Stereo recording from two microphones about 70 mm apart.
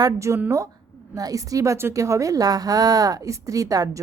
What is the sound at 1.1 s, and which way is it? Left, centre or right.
Speech, right.